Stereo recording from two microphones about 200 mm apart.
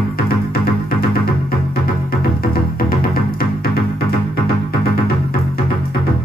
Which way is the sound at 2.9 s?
45° left (ahead or behind).